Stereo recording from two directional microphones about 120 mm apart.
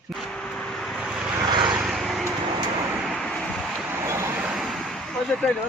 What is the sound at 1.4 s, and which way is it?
Vehicle, 40° right (ahead or behind).